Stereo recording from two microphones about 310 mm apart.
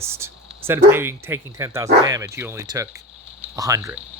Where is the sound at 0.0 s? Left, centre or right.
Centre.